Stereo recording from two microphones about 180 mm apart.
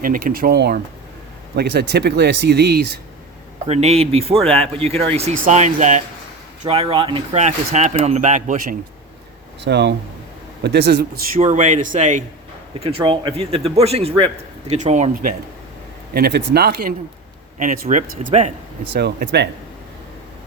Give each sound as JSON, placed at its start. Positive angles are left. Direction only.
{"t": 0.0, "sound": "speech", "side_deg": -50}
{"t": 3.7, "sound": "speech", "side_deg": -35}
{"t": 9.6, "sound": "speech", "side_deg": -70}
{"t": 11.3, "sound": "speech", "side_deg": -40}
{"t": 12.8, "sound": "speech", "side_deg": -30}
{"t": 16.1, "sound": "speech", "side_deg": -60}
{"t": 17.6, "sound": "speech", "side_deg": -45}
{"t": 18.9, "sound": "speech", "side_deg": -65}